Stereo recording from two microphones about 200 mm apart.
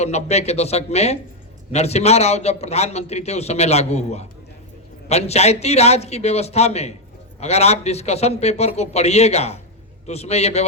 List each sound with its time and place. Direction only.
0.0 s a man's voice: 35° left (ahead or behind)